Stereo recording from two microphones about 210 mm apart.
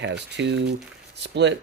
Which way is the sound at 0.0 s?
55° right (ahead or behind).